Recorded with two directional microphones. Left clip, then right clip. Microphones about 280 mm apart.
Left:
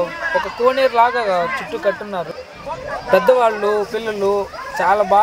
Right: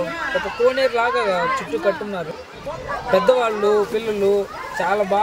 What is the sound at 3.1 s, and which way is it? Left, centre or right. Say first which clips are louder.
Speech: left 4 dB; centre.